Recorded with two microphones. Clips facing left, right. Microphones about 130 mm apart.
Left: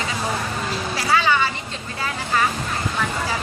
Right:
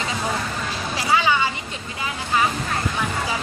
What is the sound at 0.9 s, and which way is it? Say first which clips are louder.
Vehicle: even; 15° right (ahead or behind).